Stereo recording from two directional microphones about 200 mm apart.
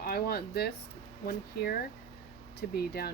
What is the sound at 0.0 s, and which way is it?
Speech, 50° left (ahead or behind).